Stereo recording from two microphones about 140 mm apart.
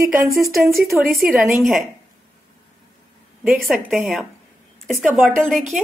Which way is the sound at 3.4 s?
5° right (ahead or behind).